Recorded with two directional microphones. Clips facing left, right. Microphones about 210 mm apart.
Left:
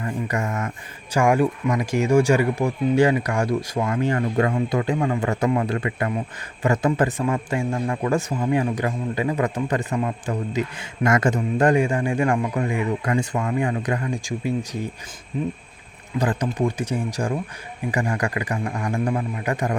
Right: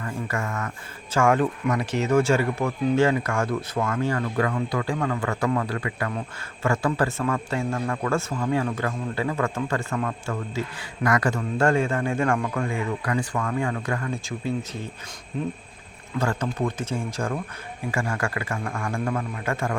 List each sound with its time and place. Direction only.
0.0 s speech: 20° left (ahead or behind)
16.1 s speech: 15° left (ahead or behind)